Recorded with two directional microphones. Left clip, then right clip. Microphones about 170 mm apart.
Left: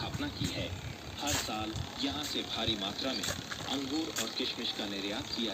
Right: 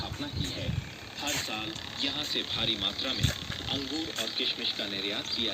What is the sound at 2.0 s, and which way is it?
Speech, 85° left.